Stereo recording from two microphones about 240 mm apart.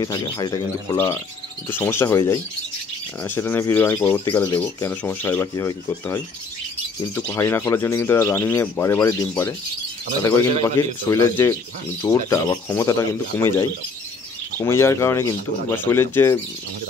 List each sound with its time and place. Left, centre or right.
0.0 s speech: centre
10.8 s speech: centre